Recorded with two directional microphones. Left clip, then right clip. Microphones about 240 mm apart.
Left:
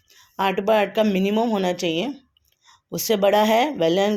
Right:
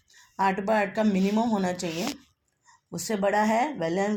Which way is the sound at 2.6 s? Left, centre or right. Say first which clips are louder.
Left 9 dB; left.